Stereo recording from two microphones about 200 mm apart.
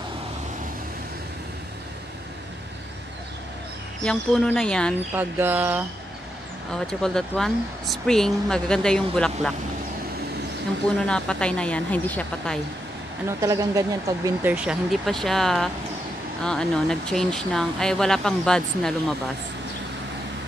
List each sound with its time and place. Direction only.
4.0 s speech: 5° left (ahead or behind)
5.1 s bird: 10° right (ahead or behind)
6.7 s speech: 5° left (ahead or behind)
11.1 s speech: 5° left (ahead or behind)
13.4 s speech: 15° right (ahead or behind); by 19.1 s 5° left (ahead or behind)